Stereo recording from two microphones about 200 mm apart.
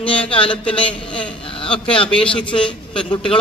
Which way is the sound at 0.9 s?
5° left (ahead or behind).